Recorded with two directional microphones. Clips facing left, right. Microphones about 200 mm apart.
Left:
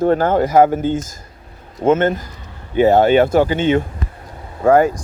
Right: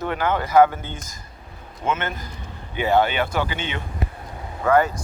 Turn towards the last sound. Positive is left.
turn(degrees=45)  # may be behind; listen again after turning